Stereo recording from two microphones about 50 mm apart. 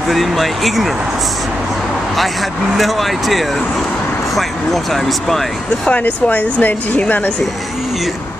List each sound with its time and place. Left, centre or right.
0.1 s speech: centre
2.7 s speech: centre
5.9 s speech: left